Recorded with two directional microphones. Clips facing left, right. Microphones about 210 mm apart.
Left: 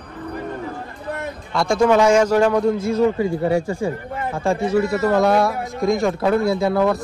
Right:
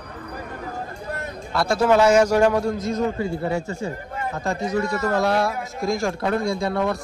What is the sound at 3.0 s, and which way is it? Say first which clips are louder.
Speech: left 5 dB; 90° left.